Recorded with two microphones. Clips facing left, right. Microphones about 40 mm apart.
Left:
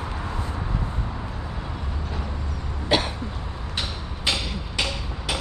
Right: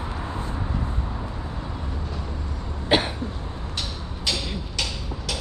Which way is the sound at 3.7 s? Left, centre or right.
Left.